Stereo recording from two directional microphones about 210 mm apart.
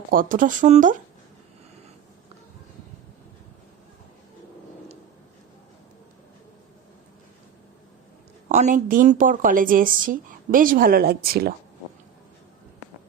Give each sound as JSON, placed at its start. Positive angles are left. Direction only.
{"t": 0.1, "sound": "a woman's voice", "side_deg": -40}
{"t": 8.4, "sound": "a woman's voice", "side_deg": -35}